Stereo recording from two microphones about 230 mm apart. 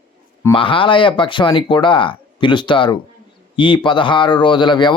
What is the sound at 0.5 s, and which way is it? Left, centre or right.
Speech, left.